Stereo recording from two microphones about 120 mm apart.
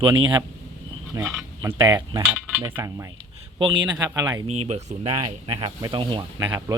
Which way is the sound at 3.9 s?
30° right (ahead or behind).